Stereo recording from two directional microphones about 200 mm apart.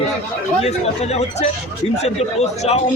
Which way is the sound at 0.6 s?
30° left (ahead or behind).